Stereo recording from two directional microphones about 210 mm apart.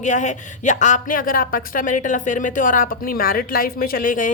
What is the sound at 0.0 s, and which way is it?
A woman's voice, 35° left (ahead or behind).